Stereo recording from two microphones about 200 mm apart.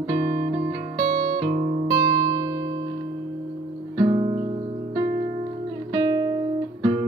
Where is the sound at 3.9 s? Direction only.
25° right (ahead or behind).